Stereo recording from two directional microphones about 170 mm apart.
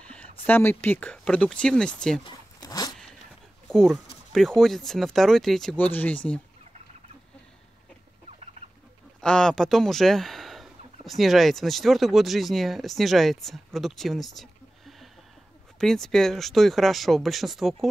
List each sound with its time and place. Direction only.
0.1 s speech: 10° left (ahead or behind)
2.2 s zipper: 25° left (ahead or behind)
3.6 s speech: 5° left (ahead or behind)
9.2 s speech: 5° left (ahead or behind)